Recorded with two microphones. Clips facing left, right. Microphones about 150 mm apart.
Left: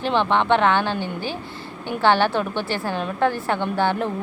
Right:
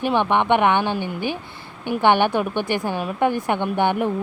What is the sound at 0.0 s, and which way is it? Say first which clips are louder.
A woman's voice: right 1 dB; 15° right (ahead or behind).